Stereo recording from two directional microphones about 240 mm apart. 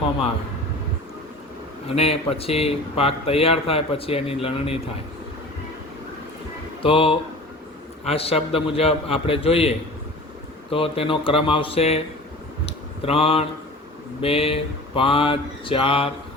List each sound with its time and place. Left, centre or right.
1.9 s speech: left
6.8 s speech: left